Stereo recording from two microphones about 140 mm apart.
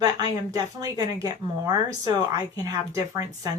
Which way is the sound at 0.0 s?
25° right (ahead or behind).